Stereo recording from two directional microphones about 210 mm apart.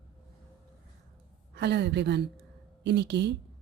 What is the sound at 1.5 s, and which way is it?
Speech, 55° right (ahead or behind).